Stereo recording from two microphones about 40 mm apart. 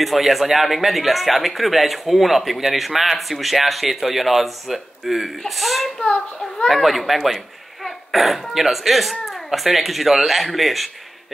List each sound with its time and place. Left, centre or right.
0.0 s a man's voice: centre
5.9 s a child's voice: left
6.7 s a man's voice: centre